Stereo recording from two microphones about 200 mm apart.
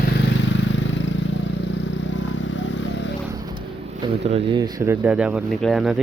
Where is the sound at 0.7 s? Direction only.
65° left (ahead or behind).